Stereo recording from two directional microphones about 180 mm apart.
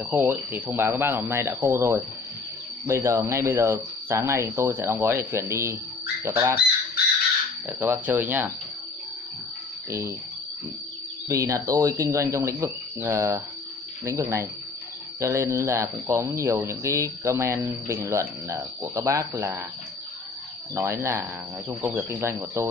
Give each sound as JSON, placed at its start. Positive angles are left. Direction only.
{"t": 0.0, "sound": "speech", "side_deg": -10}
{"t": 7.6, "sound": "speech", "side_deg": -15}
{"t": 9.8, "sound": "speech", "side_deg": -15}
{"t": 11.2, "sound": "speech", "side_deg": -15}
{"t": 20.7, "sound": "speech", "side_deg": -15}